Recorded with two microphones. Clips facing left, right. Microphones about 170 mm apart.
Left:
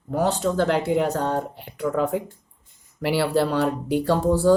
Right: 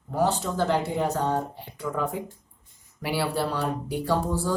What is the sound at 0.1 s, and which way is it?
Speech, 65° left (ahead or behind).